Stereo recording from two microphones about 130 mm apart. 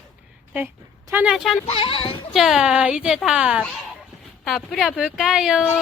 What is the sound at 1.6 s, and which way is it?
Speech, 45° left (ahead or behind).